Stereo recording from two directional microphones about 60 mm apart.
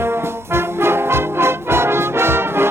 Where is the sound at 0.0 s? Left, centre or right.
Right.